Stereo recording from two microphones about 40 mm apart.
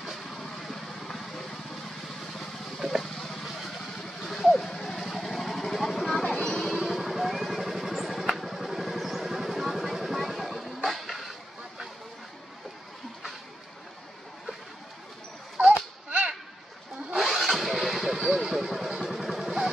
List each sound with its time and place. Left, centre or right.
0.0 s vehicle: centre
3.0 s vehicle: centre
4.2 s a sound: centre
4.8 s vehicle: centre
6.8 s vehicle: centre
15.6 s a sound: right
17.2 s vehicle: centre
18.9 s vehicle: centre